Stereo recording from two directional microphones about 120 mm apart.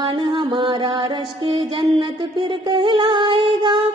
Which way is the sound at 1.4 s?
45° right (ahead or behind).